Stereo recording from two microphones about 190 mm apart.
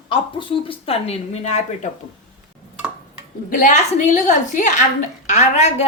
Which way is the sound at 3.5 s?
45° left (ahead or behind).